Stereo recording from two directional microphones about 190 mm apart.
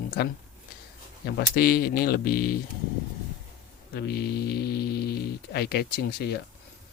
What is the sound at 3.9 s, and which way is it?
Speech, 60° left (ahead or behind).